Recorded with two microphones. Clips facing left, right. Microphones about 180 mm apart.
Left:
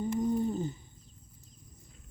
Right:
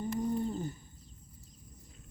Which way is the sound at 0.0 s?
15° left (ahead or behind).